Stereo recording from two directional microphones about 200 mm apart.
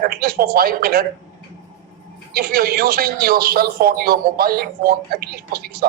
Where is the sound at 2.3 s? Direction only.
50° right (ahead or behind).